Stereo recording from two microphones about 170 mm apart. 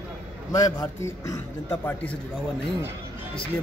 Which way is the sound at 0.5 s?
20° left (ahead or behind).